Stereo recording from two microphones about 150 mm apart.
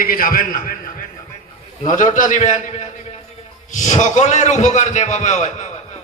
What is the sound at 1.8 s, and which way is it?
A man's voice, 55° left (ahead or behind).